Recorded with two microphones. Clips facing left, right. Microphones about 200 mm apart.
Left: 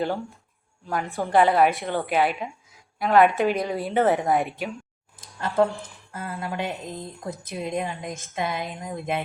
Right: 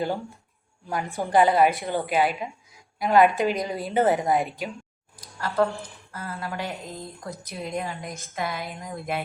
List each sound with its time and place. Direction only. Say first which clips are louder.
0.0 s a woman's voice: left 1 dB; centre (ahead or behind)
5.5 s a woman's voice: left 2 dB; 20° left (ahead or behind)